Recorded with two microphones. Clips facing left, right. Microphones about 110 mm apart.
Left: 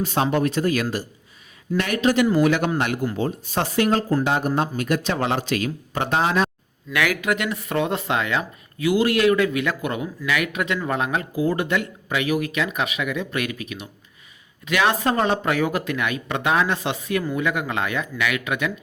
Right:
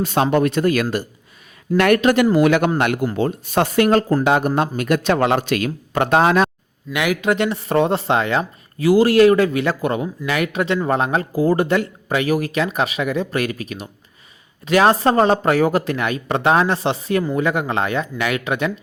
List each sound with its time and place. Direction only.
0.0 s speech: 65° right (ahead or behind)
6.9 s speech: 20° right (ahead or behind)